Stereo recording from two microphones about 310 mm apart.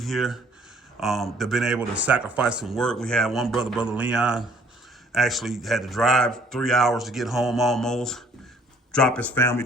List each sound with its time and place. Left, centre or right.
0.0 s speech: centre